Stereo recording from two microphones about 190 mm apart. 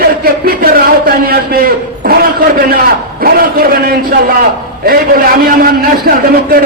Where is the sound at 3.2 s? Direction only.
50° right (ahead or behind).